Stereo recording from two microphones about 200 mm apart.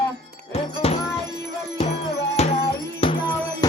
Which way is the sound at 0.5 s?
30° left (ahead or behind).